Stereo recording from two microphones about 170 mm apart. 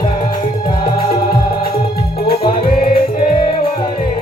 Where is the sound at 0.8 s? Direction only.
30° left (ahead or behind).